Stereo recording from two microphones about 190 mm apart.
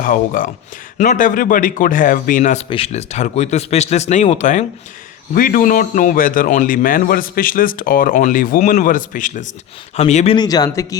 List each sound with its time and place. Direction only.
0.0 s a man's voice: 45° left (ahead or behind)
2.6 s speech: 30° left (ahead or behind)
5.3 s a man's voice: 50° left (ahead or behind)
10.3 s speech: 20° left (ahead or behind)